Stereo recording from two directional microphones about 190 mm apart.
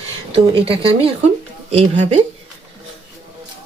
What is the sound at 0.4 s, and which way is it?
Speech, 30° right (ahead or behind).